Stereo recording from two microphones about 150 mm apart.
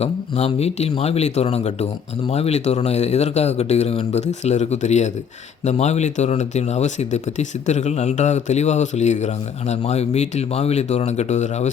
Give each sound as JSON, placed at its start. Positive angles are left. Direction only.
{"t": 0.0, "sound": "speech", "side_deg": 45}